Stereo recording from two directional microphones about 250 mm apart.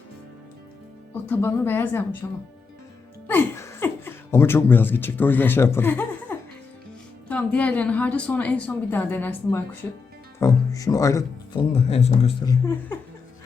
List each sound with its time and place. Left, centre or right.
1.1 s speech: centre
3.2 s a woman's voice: centre
11.7 s speech: left